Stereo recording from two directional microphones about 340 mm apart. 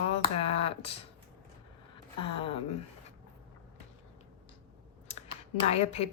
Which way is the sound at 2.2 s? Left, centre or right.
Centre.